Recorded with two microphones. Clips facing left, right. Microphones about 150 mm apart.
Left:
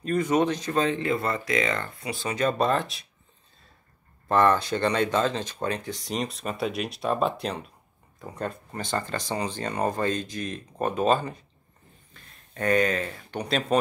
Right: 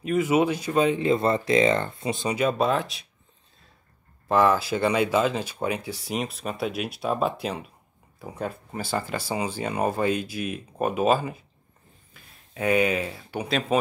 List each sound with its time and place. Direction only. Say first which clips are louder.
0.0 s speech: right 1 dB; 5° right (ahead or behind)
2.3 s speech: even; 5° right (ahead or behind)
4.3 s speech: right 1 dB; 5° right (ahead or behind)